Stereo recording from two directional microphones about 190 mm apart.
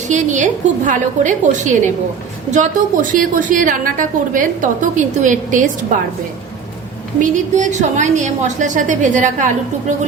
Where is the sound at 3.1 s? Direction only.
45° right (ahead or behind).